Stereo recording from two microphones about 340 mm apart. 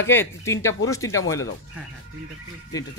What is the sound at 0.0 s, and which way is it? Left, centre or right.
Speech, centre.